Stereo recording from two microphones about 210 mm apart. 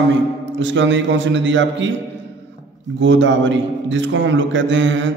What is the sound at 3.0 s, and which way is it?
A man's voice, 60° right (ahead or behind).